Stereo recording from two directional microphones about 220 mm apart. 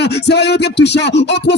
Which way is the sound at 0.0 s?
50° left (ahead or behind).